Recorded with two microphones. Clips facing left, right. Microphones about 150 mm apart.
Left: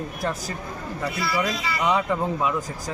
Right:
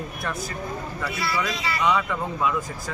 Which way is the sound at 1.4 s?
35° left (ahead or behind).